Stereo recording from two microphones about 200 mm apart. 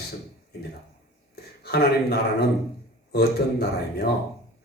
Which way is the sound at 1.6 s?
50° left (ahead or behind).